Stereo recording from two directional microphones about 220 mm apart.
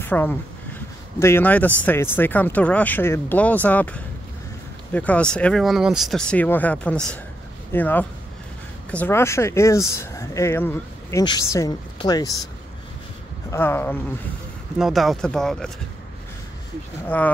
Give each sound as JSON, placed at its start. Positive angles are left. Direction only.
{"t": 0.0, "sound": "speech", "side_deg": 10}
{"t": 13.5, "sound": "speech", "side_deg": 10}
{"t": 14.8, "sound": "speech", "side_deg": 0}
{"t": 17.1, "sound": "speech", "side_deg": 10}